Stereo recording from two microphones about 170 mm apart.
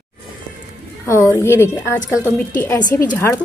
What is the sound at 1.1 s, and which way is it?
A woman's voice, 15° left (ahead or behind).